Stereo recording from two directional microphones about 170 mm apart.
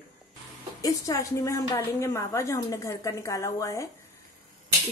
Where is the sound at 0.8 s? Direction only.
20° left (ahead or behind).